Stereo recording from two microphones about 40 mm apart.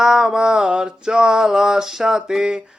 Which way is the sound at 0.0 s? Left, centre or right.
Centre.